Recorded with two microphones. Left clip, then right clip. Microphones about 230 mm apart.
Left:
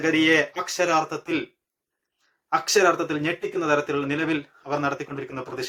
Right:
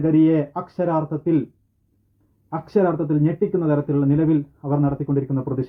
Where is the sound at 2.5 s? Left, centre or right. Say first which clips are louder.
Left 1 dB; left.